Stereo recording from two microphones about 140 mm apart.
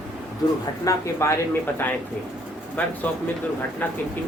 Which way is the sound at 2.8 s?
10° left (ahead or behind).